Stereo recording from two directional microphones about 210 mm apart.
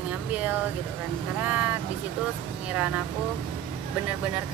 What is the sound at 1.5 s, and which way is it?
Speech, 5° right (ahead or behind).